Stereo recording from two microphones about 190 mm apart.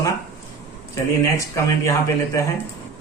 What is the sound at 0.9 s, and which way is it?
A man's voice, 15° left (ahead or behind).